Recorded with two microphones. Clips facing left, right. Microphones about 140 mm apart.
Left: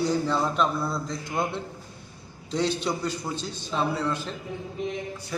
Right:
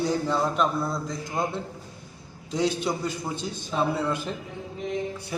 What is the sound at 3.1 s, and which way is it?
Speech, 50° right (ahead or behind).